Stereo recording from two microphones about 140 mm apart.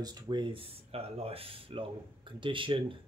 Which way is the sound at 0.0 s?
30° right (ahead or behind).